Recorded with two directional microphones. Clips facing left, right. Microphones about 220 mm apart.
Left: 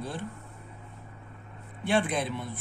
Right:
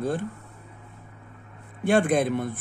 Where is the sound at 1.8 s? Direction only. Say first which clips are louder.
Right 6 dB; 50° right (ahead or behind).